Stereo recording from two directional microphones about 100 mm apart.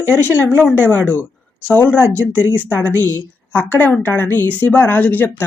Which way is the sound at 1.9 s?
15° right (ahead or behind).